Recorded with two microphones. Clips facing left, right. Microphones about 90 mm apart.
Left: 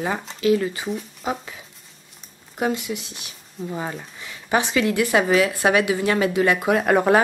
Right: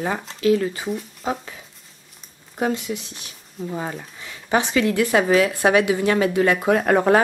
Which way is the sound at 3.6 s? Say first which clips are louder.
Right 1 dB; centre (ahead or behind).